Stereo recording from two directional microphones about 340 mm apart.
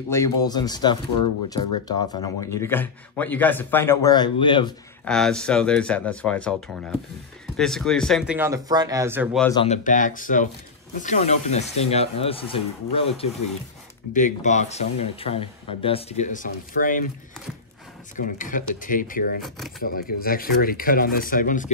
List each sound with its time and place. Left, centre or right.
0.1 s a man's voice: centre
5.0 s speech: centre
7.5 s speech: centre
9.5 s a man's voice: centre
18.2 s speech: left